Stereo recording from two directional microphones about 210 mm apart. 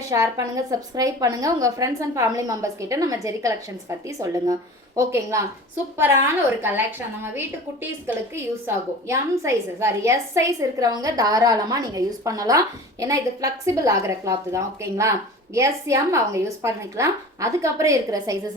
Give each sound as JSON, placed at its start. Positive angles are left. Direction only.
{"t": 0.1, "sound": "a woman's voice", "side_deg": -15}
{"t": 6.6, "sound": "a woman's voice", "side_deg": -10}